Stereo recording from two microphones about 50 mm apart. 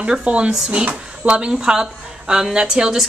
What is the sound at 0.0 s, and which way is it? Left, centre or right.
A woman's voice, right.